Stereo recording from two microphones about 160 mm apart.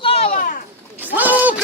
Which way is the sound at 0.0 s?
35° left (ahead or behind).